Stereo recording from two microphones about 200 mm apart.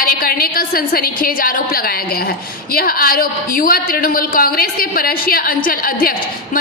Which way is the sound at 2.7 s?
50° left (ahead or behind).